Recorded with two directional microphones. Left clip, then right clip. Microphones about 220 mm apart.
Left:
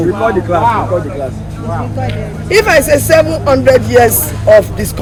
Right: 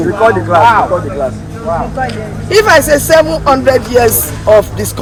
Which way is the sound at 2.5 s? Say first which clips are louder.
Right 1 dB; 5° right (ahead or behind).